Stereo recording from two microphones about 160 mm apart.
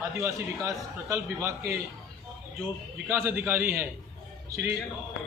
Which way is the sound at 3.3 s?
10° right (ahead or behind).